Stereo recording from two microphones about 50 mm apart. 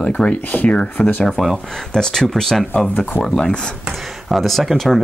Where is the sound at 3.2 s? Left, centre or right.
Centre.